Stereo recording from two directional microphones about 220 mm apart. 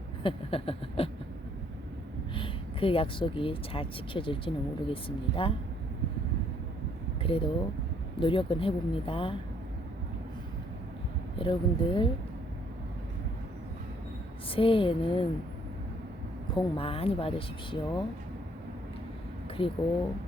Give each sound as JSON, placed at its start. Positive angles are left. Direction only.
{"t": 0.2, "sound": "speech", "side_deg": 25}
{"t": 2.3, "sound": "speech", "side_deg": 25}
{"t": 7.2, "sound": "speech", "side_deg": 25}
{"t": 11.3, "sound": "speech", "side_deg": 25}
{"t": 14.5, "sound": "speech", "side_deg": 25}
{"t": 16.6, "sound": "speech", "side_deg": 25}
{"t": 19.6, "sound": "speech", "side_deg": 25}